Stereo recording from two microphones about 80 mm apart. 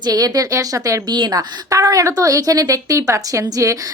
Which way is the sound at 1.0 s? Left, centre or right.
Right.